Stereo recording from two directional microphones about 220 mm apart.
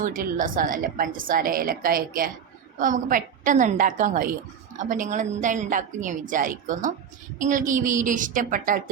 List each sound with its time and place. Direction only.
0.0 s a woman's voice: 40° right (ahead or behind)